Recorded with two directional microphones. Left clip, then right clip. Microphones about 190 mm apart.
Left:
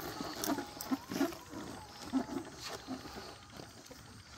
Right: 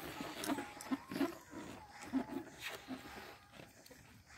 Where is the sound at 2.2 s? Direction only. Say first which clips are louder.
Left 4 dB; 25° right (ahead or behind).